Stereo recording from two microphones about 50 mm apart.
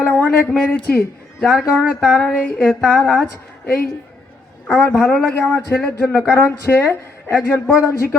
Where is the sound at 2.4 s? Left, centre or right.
Left.